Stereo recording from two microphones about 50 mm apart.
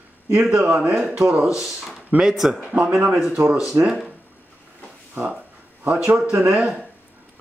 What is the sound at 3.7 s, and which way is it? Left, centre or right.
Speech, right.